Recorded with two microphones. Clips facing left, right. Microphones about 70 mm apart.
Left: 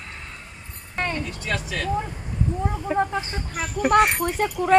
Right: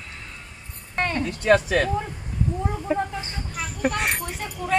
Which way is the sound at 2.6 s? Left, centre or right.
Centre.